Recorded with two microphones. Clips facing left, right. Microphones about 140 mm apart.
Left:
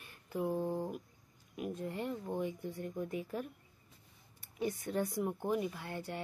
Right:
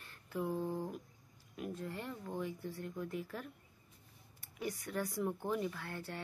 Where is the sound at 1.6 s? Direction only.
20° left (ahead or behind).